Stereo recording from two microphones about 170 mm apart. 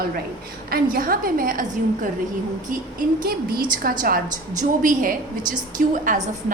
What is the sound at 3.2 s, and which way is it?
A woman's voice, 60° right (ahead or behind).